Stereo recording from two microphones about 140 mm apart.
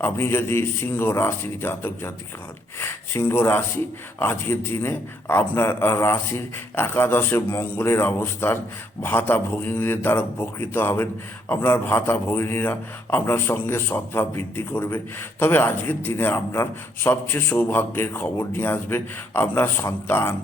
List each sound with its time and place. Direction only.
0.0 s a man's voice: 15° left (ahead or behind)